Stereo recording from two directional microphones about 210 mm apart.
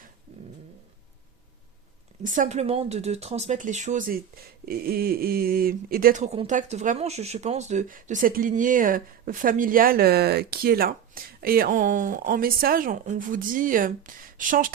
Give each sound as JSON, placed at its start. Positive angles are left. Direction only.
{"t": 2.2, "sound": "speech", "side_deg": -40}